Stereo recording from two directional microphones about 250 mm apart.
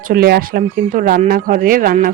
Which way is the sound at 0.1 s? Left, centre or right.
Right.